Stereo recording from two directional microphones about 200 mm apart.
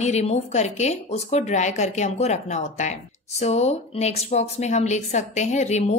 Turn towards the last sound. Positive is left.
turn(degrees=35)  # may be behind; listen again after turning